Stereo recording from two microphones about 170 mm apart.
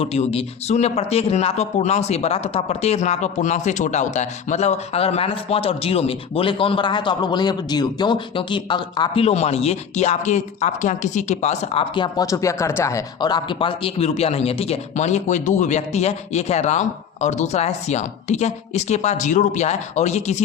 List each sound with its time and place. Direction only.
0.0 s speech: 35° left (ahead or behind)